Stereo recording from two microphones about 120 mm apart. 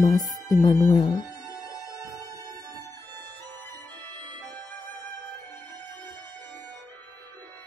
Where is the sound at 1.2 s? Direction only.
30° left (ahead or behind).